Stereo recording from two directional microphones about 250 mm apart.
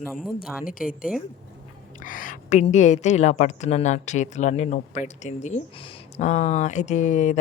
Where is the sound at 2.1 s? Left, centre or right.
Left.